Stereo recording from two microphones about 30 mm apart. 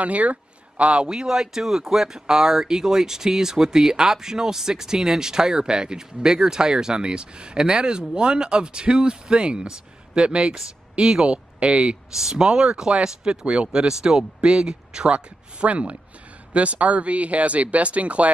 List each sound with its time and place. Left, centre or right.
0.0 s speech: right
1.0 s speech: right
11.0 s speech: right
11.2 s speech: right
12.2 s speech: centre
14.4 s speech: right
15.0 s speech: right